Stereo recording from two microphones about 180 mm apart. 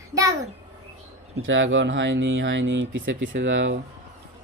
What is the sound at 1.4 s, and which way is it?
Speech, 90° right.